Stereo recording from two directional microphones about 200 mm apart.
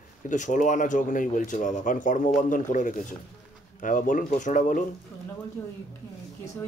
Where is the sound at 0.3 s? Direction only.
40° left (ahead or behind).